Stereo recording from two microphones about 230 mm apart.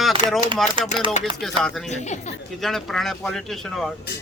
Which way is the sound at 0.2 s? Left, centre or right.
Right.